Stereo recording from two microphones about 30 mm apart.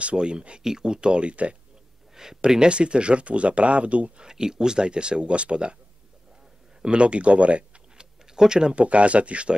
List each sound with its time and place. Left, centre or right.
0.0 s speech: right
0.6 s speech: right
2.1 s speech: centre; by 4.1 s right
4.2 s speech: right
6.8 s speech: right
8.0 s tick-tock: right
8.7 s speech: right